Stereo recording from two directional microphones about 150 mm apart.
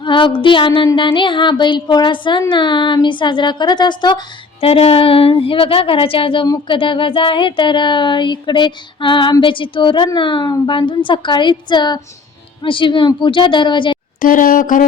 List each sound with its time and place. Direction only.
0.0 s speech: 35° left (ahead or behind)
4.6 s speech: 40° left (ahead or behind)
14.2 s speech: 65° left (ahead or behind)